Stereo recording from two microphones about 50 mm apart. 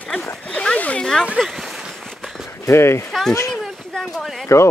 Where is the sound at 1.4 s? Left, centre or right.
Centre.